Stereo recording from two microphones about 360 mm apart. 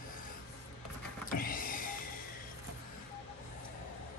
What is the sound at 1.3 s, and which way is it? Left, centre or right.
Power windows, left.